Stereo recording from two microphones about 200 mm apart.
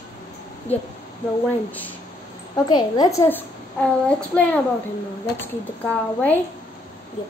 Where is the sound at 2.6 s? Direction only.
20° left (ahead or behind).